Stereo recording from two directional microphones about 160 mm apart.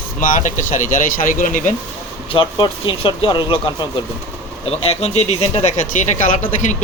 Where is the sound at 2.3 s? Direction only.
30° left (ahead or behind).